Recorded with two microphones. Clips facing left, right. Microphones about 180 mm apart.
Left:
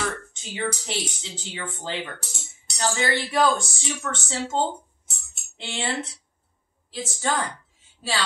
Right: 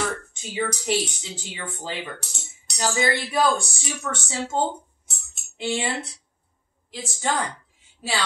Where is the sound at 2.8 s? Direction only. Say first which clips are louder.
Right 1 dB; 10° right (ahead or behind).